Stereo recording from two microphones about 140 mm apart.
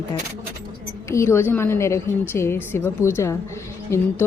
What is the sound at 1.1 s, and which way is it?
A woman's voice, 20° left (ahead or behind).